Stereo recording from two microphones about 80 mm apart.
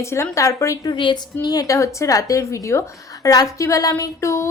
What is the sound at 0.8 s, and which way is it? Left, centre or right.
Speech, left.